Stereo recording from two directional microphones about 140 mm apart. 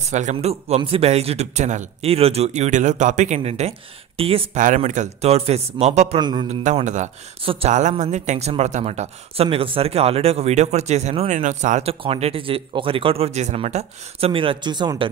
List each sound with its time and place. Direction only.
0.0 s speech: 55° right (ahead or behind)
4.6 s speech: 60° right (ahead or behind)
6.1 s speech: 30° right (ahead or behind)
6.5 s a man's voice: 55° right (ahead or behind)
11.9 s speech: 45° right (ahead or behind)